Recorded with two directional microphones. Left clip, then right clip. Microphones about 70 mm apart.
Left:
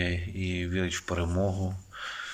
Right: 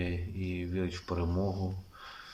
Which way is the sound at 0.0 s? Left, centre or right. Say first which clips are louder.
Left 6 dB; centre.